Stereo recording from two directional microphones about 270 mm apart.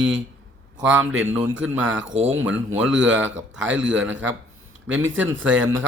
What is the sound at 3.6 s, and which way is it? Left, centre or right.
Speech, right.